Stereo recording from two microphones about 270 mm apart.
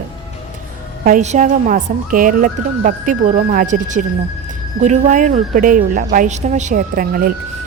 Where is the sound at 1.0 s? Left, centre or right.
Right.